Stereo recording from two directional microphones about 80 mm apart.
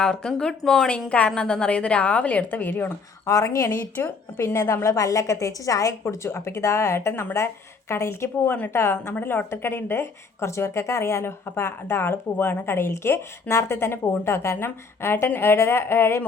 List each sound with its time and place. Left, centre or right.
0.0 s a woman's voice: centre
3.2 s a woman's voice: left
4.4 s a woman's voice: left
4.9 s a woman's voice: left